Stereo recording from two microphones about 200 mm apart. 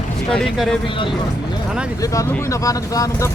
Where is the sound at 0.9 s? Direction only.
25° left (ahead or behind).